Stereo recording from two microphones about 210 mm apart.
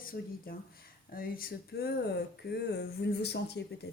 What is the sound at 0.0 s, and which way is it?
Speech, 40° left (ahead or behind).